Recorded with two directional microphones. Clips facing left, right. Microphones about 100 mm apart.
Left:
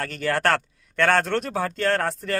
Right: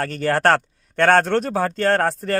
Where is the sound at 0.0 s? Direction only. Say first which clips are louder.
Right 5 dB; 35° right (ahead or behind).